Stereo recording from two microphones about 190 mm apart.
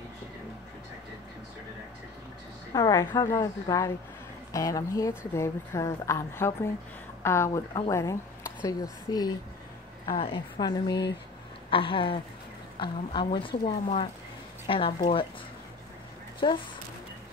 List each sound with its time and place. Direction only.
2.7 s a woman's voice: 20° left (ahead or behind)
16.4 s a woman's voice: 25° left (ahead or behind)